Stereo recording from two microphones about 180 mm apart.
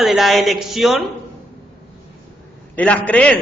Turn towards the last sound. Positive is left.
turn(degrees=5)  # may be behind; listen again after turning